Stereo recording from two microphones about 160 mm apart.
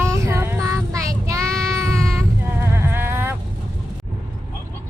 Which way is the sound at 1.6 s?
20° right (ahead or behind).